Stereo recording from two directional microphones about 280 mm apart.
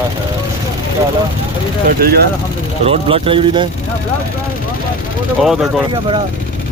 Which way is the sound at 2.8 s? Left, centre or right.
Right.